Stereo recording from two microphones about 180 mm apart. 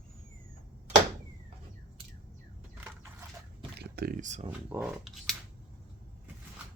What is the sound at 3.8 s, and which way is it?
Speech, 60° right (ahead or behind).